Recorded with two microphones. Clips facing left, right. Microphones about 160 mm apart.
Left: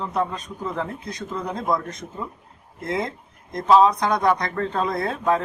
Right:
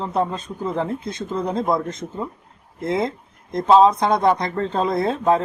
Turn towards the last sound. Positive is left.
turn(degrees=-25)  # may be behind; listen again after turning